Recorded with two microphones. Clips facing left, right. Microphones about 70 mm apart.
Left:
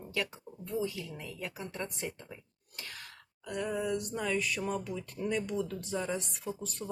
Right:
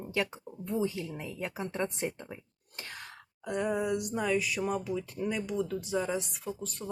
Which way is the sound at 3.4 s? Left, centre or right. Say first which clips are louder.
Right 3 dB; right.